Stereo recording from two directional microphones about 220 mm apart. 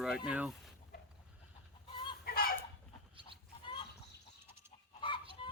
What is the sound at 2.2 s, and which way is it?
Chicken, 45° left (ahead or behind).